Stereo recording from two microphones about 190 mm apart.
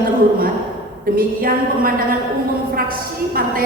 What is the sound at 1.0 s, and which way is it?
A woman's voice, 50° right (ahead or behind).